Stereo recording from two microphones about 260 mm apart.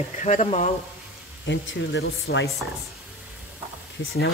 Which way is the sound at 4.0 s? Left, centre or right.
Left.